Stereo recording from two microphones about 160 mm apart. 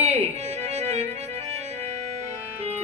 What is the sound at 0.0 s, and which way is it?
Music, 40° right (ahead or behind).